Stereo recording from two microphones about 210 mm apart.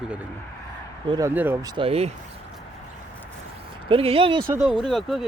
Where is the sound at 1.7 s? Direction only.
25° right (ahead or behind).